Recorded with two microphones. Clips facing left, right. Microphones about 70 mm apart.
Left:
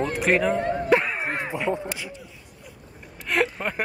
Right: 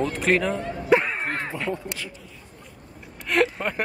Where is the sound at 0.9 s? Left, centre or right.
Centre.